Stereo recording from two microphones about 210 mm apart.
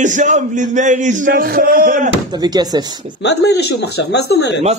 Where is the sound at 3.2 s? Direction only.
55° left (ahead or behind).